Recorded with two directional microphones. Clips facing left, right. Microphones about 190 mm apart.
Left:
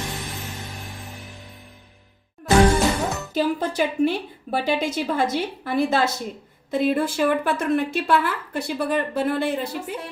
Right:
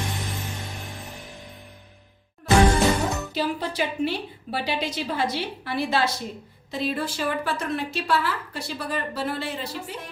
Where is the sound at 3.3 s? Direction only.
45° left (ahead or behind).